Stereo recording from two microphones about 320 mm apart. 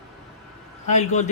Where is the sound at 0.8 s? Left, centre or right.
Left.